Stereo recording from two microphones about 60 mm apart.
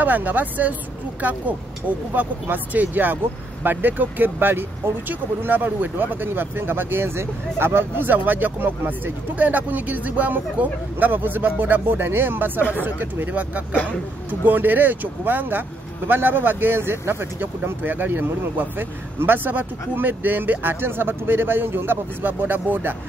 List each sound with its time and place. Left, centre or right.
0.0 s speech: right
2.4 s speech: right